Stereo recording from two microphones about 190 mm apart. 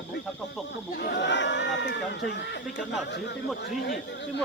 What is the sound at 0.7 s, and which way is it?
A man's voice, 60° left (ahead or behind).